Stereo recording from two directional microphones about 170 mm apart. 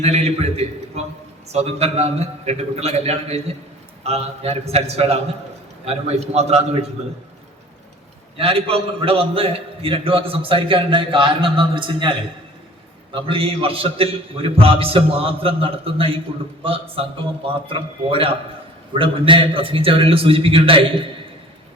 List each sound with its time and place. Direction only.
0.0 s a man's voice: 40° right (ahead or behind)
8.4 s a man's voice: 35° right (ahead or behind)
13.1 s a man's voice: 30° right (ahead or behind)